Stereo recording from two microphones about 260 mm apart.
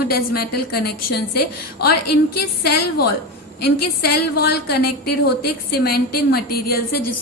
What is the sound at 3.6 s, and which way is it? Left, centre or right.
A woman's voice, left.